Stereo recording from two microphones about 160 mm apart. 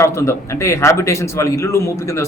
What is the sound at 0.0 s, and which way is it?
A man's voice, 15° left (ahead or behind).